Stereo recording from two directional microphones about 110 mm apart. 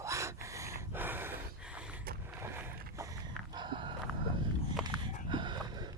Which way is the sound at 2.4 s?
25° right (ahead or behind).